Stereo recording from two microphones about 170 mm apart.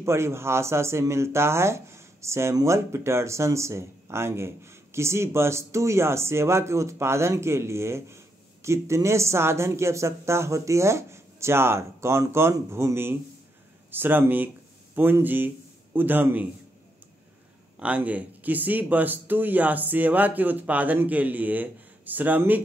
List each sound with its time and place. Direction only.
0.0 s speech: 15° right (ahead or behind)
17.7 s speech: 5° right (ahead or behind)